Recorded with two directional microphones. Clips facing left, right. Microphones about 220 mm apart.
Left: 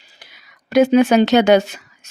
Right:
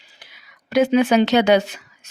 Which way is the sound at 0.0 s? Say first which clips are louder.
Left 2 dB; 40° left (ahead or behind).